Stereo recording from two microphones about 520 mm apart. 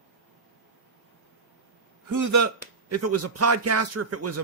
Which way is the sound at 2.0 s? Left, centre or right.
Right.